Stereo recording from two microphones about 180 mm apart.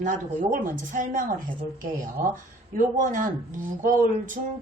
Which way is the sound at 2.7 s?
50° right (ahead or behind).